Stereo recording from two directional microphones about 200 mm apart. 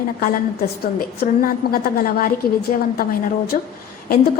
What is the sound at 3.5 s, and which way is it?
Speech, 40° left (ahead or behind).